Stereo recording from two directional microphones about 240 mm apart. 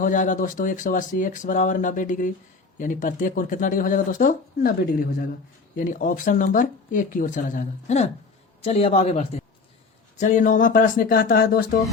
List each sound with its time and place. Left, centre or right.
0.0 s a man's voice: left